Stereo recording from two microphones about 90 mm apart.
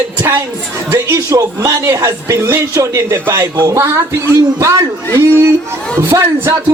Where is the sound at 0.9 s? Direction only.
35° right (ahead or behind).